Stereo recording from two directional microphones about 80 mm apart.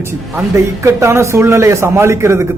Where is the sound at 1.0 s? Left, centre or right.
Right.